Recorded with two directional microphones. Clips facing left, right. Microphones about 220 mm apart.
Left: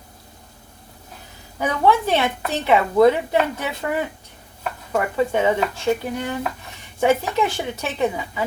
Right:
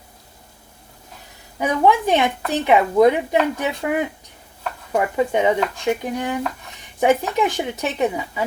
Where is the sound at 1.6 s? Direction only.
15° right (ahead or behind).